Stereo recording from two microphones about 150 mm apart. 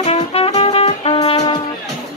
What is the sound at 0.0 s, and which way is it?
Music, 40° left (ahead or behind).